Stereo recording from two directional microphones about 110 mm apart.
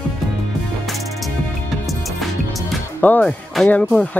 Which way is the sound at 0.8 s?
Centre (ahead or behind).